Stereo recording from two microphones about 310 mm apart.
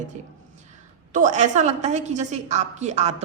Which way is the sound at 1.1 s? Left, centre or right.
Right.